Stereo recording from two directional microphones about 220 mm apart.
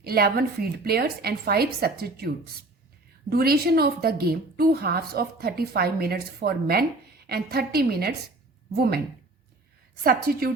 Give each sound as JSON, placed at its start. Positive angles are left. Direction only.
{"t": 0.0, "sound": "a woman's voice", "side_deg": -45}
{"t": 10.0, "sound": "a woman's voice", "side_deg": -40}